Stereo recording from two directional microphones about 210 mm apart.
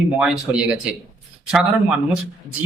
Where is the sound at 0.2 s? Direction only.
5° right (ahead or behind).